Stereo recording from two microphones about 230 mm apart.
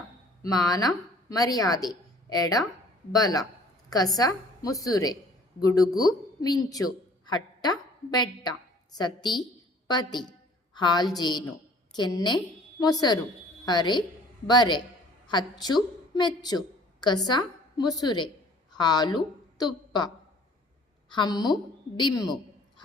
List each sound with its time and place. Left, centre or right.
0.4 s a woman's voice: centre
21.1 s a woman's voice: centre